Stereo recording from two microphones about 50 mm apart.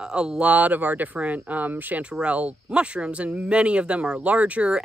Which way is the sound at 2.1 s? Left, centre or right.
Right.